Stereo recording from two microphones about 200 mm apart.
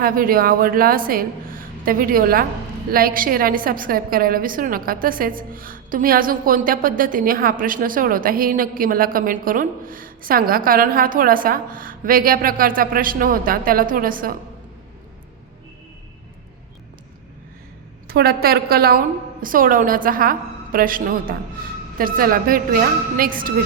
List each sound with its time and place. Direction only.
0.0 s a woman's voice: 45° right (ahead or behind)
18.1 s a woman's voice: 50° right (ahead or behind)